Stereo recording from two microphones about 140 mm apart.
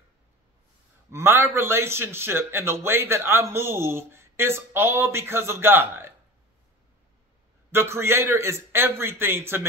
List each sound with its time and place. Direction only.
1.1 s a man's voice: 15° right (ahead or behind)
7.7 s a man's voice: 20° right (ahead or behind)